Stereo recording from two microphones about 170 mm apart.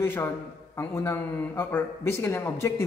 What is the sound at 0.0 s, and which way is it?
A man's voice, 15° left (ahead or behind).